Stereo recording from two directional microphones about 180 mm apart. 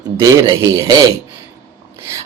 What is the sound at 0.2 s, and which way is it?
Speech, 20° right (ahead or behind).